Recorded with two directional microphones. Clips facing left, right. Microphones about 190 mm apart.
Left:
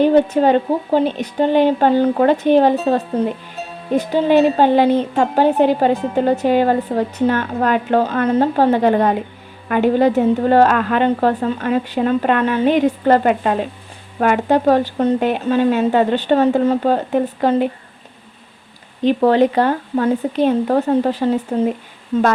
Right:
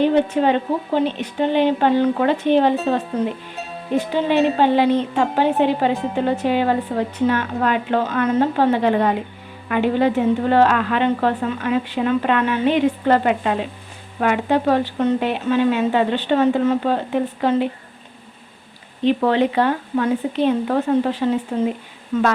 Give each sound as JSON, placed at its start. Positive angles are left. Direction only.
{"t": 0.0, "sound": "a woman's voice", "side_deg": 40}
{"t": 3.1, "sound": "a woman's voice", "side_deg": 30}
{"t": 3.9, "sound": "a woman's voice", "side_deg": 40}
{"t": 19.0, "sound": "a woman's voice", "side_deg": 40}